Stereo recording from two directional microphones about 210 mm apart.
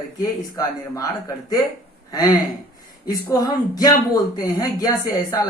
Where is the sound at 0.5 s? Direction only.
15° left (ahead or behind).